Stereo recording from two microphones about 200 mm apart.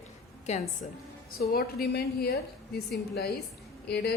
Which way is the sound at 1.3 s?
50° left (ahead or behind).